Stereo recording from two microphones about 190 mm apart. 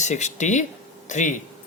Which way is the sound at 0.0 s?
35° left (ahead or behind).